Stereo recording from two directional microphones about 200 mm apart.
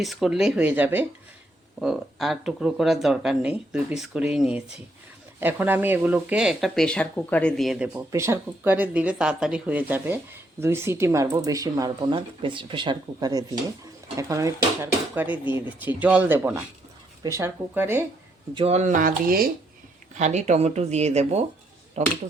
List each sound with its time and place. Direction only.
0.0 s speech: centre (ahead or behind)
18.5 s speech: 30° right (ahead or behind)
20.1 s speech: 35° right (ahead or behind)